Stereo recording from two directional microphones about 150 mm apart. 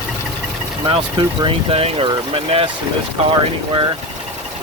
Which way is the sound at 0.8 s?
35° right (ahead or behind).